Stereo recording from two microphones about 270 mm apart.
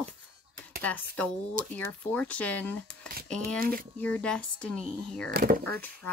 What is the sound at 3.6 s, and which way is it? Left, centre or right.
Speech, right.